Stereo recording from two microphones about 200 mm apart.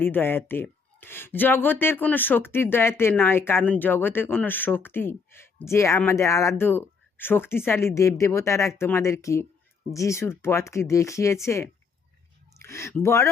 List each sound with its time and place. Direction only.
0.0 s speech: 10° left (ahead or behind)